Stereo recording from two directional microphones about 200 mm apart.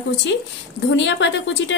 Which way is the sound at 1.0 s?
65° left (ahead or behind).